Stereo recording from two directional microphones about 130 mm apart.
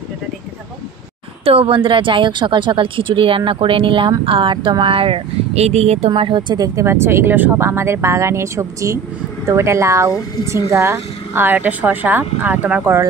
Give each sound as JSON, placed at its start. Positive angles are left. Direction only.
{"t": 1.4, "sound": "a woman's voice", "side_deg": -45}